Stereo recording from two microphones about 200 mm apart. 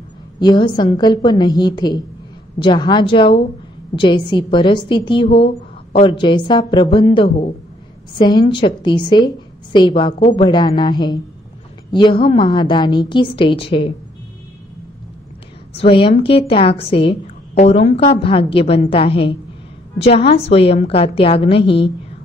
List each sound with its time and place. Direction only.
0.4 s a woman's voice: 20° left (ahead or behind)
15.7 s a woman's voice: 30° left (ahead or behind)